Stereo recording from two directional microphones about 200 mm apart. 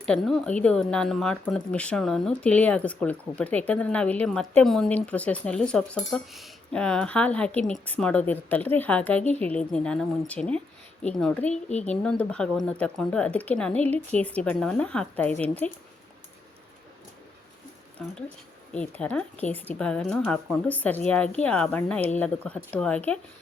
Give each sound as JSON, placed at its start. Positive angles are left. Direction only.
{"t": 0.0, "sound": "a woman's voice", "side_deg": 5}
{"t": 11.5, "sound": "speech", "side_deg": 35}
{"t": 11.9, "sound": "speech", "side_deg": 5}
{"t": 18.0, "sound": "a woman's voice", "side_deg": 5}